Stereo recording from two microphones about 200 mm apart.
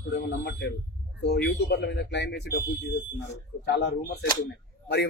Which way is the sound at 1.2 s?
65° left (ahead or behind).